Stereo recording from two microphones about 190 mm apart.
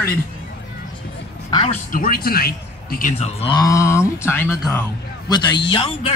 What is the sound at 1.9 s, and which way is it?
Speech, 50° left (ahead or behind).